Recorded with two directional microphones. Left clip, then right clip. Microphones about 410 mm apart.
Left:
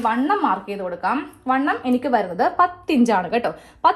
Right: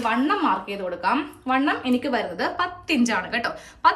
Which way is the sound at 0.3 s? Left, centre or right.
Centre.